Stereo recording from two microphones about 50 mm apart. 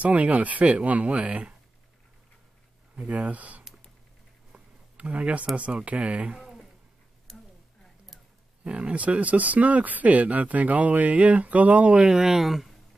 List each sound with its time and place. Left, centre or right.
0.0 s speech: right
3.0 s speech: right
4.9 s speech: right
8.6 s speech: right; by 12.7 s centre